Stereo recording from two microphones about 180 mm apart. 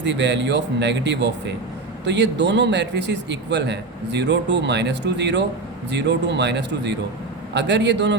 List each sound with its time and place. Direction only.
0.0 s a man's voice: 80° right